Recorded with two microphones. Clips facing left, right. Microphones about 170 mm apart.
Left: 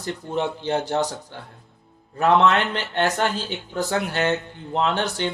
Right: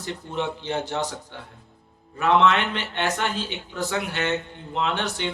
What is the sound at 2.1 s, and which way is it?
A man's voice, 35° left (ahead or behind).